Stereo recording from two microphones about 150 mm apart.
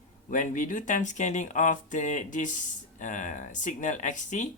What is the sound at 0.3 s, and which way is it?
Speech, 60° left (ahead or behind).